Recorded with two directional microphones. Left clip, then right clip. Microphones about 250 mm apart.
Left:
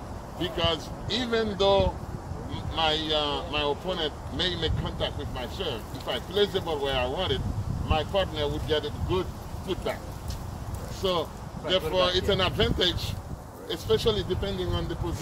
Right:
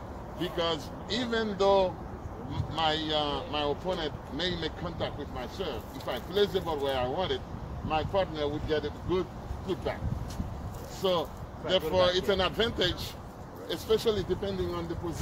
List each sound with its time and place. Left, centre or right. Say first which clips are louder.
0.4 s speech: left 3 dB; right
11.0 s speech: left 1 dB; right